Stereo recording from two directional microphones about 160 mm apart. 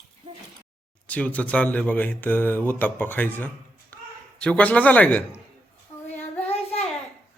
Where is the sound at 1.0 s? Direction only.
10° left (ahead or behind).